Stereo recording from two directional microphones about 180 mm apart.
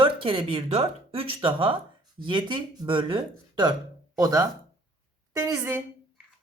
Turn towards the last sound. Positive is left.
turn(degrees=-15)  # may be behind; listen again after turning